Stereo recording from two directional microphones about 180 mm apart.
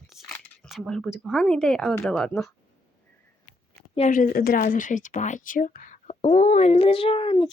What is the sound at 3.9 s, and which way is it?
Speech, 40° left (ahead or behind).